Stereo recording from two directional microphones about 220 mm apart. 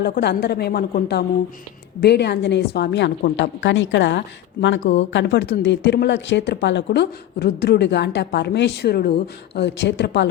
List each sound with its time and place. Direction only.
0.0 s speech: 50° left (ahead or behind)